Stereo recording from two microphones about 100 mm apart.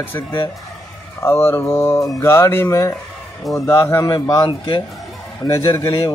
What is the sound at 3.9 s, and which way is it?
Speech, 40° left (ahead or behind).